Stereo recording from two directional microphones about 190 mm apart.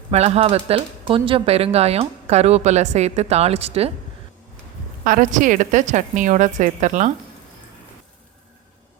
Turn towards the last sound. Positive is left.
turn(degrees=-40)  # may be behind; listen again after turning